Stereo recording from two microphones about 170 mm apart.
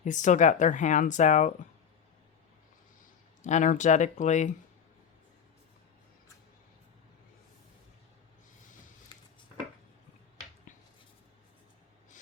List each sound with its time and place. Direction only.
0.0 s speech: 45° left (ahead or behind)
3.4 s speech: 45° left (ahead or behind)
10.7 s a sound: 50° left (ahead or behind)